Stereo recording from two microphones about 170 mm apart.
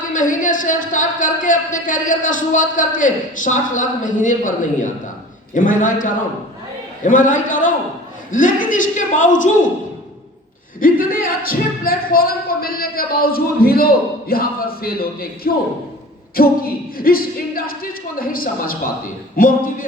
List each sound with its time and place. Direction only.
0.1 s speech: 50° left (ahead or behind)
10.8 s speech: 55° left (ahead or behind)